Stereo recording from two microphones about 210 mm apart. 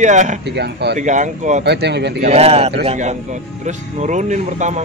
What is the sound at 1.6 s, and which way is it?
Speech, 55° right (ahead or behind).